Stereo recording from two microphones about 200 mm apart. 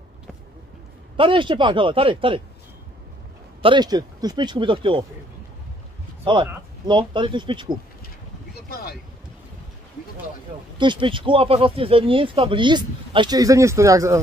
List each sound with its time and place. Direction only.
1.1 s speech: 25° right (ahead or behind)
3.6 s speech: 20° right (ahead or behind)
6.3 s speech: 25° right (ahead or behind)
10.8 s speech: 25° right (ahead or behind)